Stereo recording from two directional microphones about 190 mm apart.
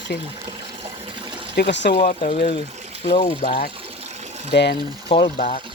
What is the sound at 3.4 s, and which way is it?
Speech, 50° left (ahead or behind).